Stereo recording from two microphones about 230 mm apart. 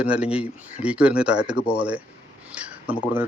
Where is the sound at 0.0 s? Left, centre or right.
Centre.